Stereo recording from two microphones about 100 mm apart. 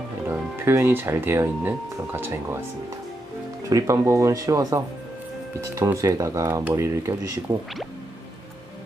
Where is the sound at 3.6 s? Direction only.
30° right (ahead or behind).